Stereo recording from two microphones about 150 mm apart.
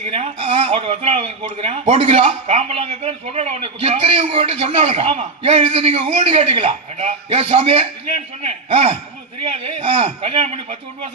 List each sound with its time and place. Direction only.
0.0 s a man's voice: 45° right (ahead or behind)